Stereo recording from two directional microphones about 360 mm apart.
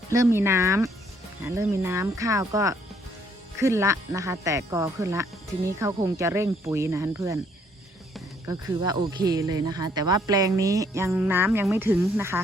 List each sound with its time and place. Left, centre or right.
0.1 s speech: centre